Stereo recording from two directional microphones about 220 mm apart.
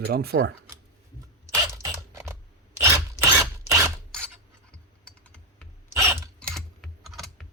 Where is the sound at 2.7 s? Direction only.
10° right (ahead or behind).